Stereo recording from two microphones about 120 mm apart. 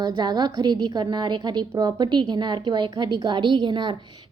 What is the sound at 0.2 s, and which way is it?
A woman's voice, 35° right (ahead or behind).